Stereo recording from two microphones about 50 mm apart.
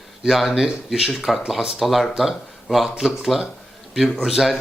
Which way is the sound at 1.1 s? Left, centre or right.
Centre.